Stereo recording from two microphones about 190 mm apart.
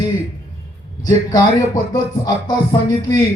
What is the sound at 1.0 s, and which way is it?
A man's voice, 20° left (ahead or behind).